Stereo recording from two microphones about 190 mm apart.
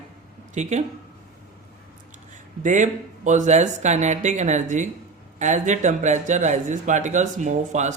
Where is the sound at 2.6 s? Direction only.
40° right (ahead or behind).